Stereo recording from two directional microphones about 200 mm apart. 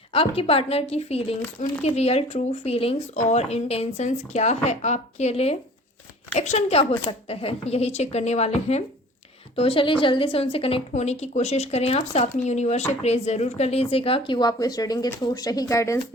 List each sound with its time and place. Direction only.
0.1 s a woman's voice: 30° left (ahead or behind)